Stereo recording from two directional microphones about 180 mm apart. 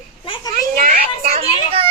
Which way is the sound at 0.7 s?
45° right (ahead or behind).